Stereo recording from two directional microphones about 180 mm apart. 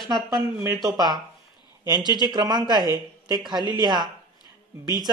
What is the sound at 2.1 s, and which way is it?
Speech, 25° right (ahead or behind).